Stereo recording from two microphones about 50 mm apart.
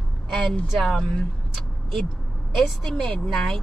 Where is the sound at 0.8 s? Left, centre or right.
Centre.